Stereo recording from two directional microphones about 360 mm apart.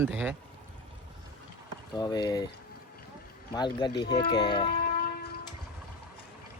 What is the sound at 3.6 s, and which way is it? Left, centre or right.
Speech, centre.